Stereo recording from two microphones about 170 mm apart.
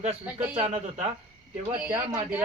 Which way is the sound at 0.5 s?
40° right (ahead or behind).